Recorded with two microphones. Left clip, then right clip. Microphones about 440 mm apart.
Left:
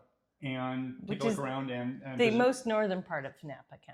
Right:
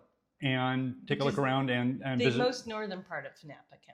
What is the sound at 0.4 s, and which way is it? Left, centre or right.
Speech, right.